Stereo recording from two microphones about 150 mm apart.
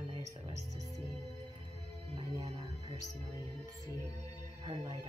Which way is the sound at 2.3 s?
45° right (ahead or behind).